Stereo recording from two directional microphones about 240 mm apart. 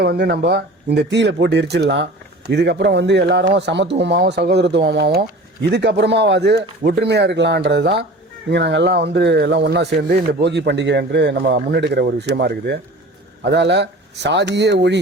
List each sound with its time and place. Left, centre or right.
0.0 s speech: right